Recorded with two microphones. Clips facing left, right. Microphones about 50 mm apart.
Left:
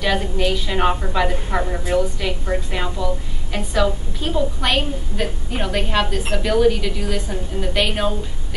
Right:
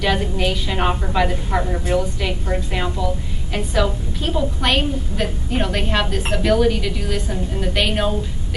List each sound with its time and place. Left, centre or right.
0.0 s a woman's voice: centre